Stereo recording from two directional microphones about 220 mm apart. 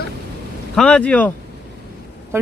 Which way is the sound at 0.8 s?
5° left (ahead or behind).